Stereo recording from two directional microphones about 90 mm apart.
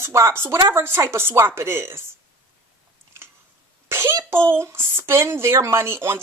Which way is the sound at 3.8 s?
30° right (ahead or behind).